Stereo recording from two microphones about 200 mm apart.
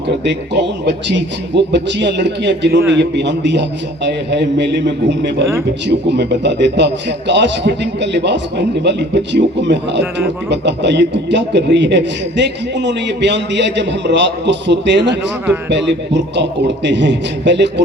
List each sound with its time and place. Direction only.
0.3 s speech: 60° right (ahead or behind)